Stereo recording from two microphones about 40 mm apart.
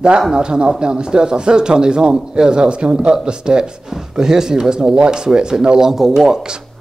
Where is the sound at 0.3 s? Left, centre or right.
Right.